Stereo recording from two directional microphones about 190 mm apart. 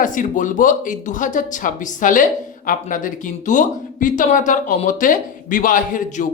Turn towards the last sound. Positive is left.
turn(degrees=40)  # may be behind; listen again after turning